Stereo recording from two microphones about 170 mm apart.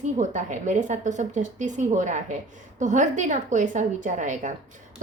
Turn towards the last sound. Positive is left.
turn(degrees=-45)  # may be behind; listen again after turning